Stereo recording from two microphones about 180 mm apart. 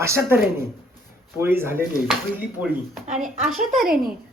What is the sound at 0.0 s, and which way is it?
Speech, 15° right (ahead or behind).